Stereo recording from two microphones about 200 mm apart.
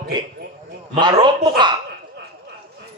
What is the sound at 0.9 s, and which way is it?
Speech, 20° right (ahead or behind).